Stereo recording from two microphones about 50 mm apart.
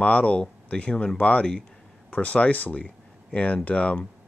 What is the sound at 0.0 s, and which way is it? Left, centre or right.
Speech, left.